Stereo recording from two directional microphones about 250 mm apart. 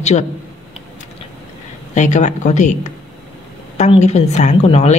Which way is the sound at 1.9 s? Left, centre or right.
Left.